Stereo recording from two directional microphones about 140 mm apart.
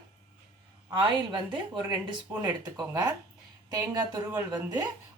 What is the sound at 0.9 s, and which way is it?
Speech, 35° right (ahead or behind).